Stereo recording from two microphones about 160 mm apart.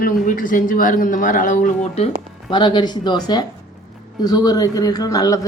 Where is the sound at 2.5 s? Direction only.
30° left (ahead or behind).